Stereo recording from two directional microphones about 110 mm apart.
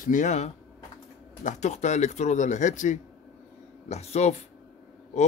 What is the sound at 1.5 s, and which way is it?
Speech, 90° left.